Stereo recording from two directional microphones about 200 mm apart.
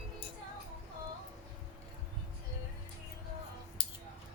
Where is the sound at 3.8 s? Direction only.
25° left (ahead or behind).